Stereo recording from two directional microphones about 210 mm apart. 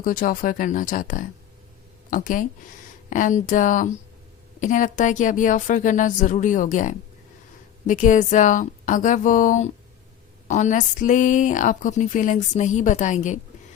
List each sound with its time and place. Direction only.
0.0 s a woman's voice: 40° left (ahead or behind)